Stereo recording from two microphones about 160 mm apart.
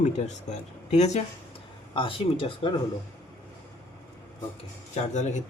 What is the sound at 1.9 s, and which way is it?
Speech, 35° left (ahead or behind).